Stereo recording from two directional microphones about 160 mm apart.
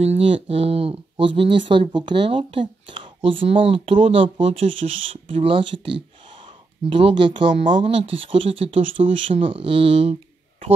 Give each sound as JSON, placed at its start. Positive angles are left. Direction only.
{"t": 0.0, "sound": "speech", "side_deg": -40}